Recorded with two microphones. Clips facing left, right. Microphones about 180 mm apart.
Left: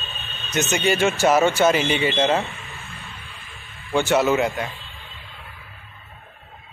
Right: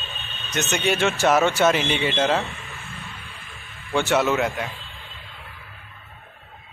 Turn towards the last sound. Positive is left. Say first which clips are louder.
# left 1 dB
turn(degrees=0)  # may be behind; listen again after turning